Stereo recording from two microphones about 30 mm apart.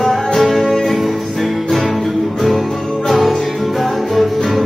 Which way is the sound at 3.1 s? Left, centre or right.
Centre.